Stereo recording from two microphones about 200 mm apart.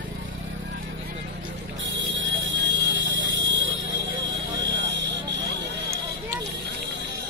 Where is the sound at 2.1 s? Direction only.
70° right (ahead or behind).